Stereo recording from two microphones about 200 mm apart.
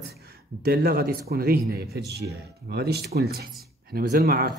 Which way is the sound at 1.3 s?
50° right (ahead or behind).